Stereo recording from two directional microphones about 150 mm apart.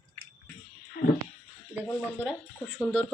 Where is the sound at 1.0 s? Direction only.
75° left (ahead or behind).